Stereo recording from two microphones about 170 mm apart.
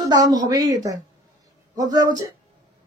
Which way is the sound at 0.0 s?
25° right (ahead or behind).